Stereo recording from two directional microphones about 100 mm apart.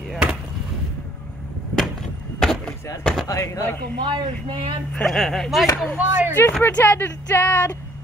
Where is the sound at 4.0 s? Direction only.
55° right (ahead or behind).